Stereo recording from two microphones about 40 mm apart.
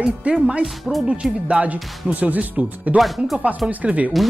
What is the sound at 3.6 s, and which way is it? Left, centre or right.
Speech, right.